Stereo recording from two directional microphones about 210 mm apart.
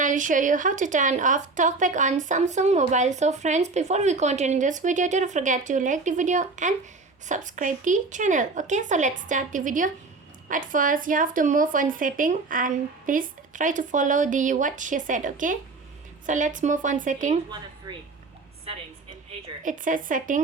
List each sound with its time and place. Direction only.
0.0 s speech: 40° right (ahead or behind)
18.7 s a woman's voice: 30° right (ahead or behind)